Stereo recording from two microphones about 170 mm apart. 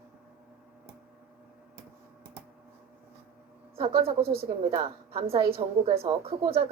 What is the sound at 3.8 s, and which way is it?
A woman's voice, 35° right (ahead or behind).